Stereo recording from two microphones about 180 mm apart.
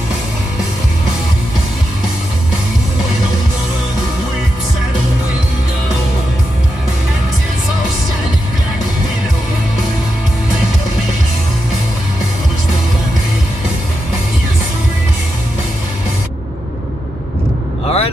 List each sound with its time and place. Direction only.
17.8 s vehicle: 35° left (ahead or behind)